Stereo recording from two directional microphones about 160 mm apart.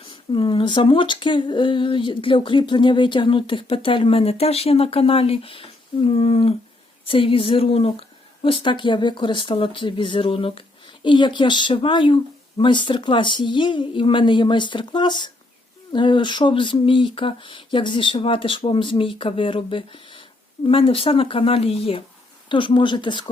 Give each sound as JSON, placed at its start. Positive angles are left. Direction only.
{"t": 0.0, "sound": "speech", "side_deg": 30}